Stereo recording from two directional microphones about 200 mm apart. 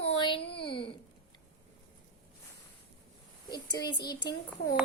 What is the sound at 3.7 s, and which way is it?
Speech, 20° left (ahead or behind).